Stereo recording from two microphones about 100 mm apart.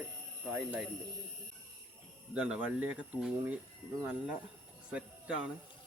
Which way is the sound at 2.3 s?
15° right (ahead or behind).